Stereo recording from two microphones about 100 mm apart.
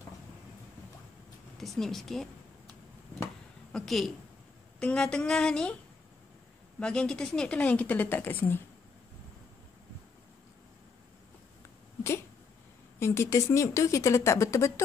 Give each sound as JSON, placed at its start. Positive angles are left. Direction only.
{"t": 1.6, "sound": "speech", "side_deg": 0}
{"t": 3.7, "sound": "a woman's voice", "side_deg": 0}
{"t": 6.8, "sound": "speech", "side_deg": 10}
{"t": 13.0, "sound": "speech", "side_deg": 30}